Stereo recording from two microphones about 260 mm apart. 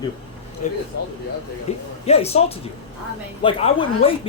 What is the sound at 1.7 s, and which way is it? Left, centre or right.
Speech, left.